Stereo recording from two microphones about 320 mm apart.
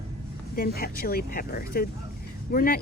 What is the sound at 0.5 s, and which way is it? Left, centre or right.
A woman's voice, left.